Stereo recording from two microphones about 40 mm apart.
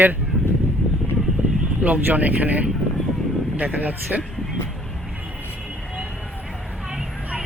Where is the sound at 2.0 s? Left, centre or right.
Right.